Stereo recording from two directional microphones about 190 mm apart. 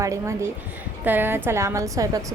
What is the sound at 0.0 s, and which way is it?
A woman's voice, 15° right (ahead or behind).